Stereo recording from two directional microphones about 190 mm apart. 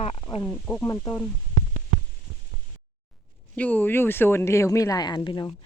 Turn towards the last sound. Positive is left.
turn(degrees=20)  # may be behind; listen again after turning